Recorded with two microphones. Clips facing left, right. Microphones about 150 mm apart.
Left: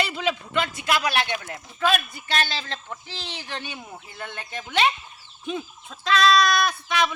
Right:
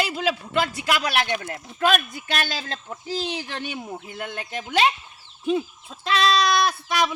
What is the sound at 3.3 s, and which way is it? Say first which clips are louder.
Speech: right 4 dB; 45° right (ahead or behind).